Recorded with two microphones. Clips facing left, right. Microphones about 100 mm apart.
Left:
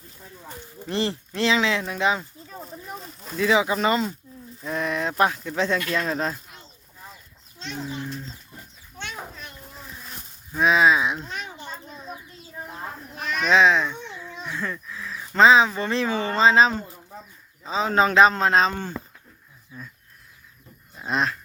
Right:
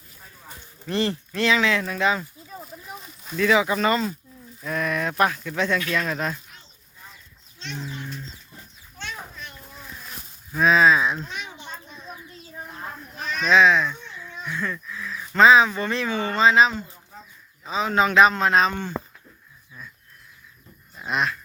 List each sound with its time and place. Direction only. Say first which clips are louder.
0.9 s speech: right 1 dB; 25° left (ahead or behind)
3.3 s speech: right 1 dB; 20° left (ahead or behind)
7.6 s speech: left 3 dB; 35° left (ahead or behind)
10.5 s speech: right 1 dB; 15° left (ahead or behind)
11.5 s a sound: left 2 dB; 5° left (ahead or behind)
13.5 s a sound: right 1 dB; 25° left (ahead or behind)
15.4 s a man's voice: even; 25° left (ahead or behind)
20.9 s dog: even; 25° left (ahead or behind)